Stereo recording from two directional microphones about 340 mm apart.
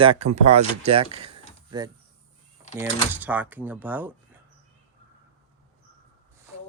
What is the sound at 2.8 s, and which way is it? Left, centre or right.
Speech, centre.